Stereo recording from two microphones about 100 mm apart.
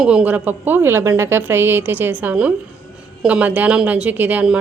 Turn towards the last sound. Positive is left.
turn(degrees=-15)  # may be behind; listen again after turning